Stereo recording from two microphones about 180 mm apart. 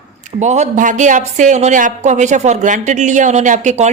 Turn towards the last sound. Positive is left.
turn(degrees=-40)  # may be behind; listen again after turning